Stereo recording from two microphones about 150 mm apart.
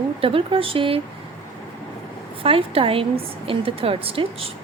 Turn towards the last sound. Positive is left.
turn(degrees=-40)  # may be behind; listen again after turning